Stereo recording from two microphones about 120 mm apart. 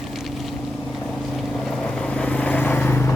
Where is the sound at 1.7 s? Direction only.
10° left (ahead or behind).